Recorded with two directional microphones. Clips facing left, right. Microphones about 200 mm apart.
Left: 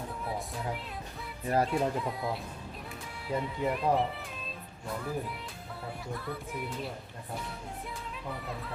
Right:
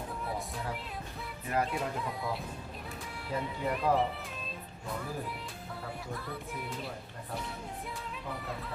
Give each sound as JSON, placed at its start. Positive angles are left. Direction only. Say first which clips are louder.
{"t": 0.3, "sound": "music", "louder": "left 3 dB", "side_deg": 0}
{"t": 1.5, "sound": "music", "louder": "left 4 dB", "side_deg": 35}
{"t": 1.7, "sound": "speech", "louder": "left 5 dB", "side_deg": 0}
{"t": 6.1, "sound": "speech", "louder": "left 3 dB", "side_deg": 0}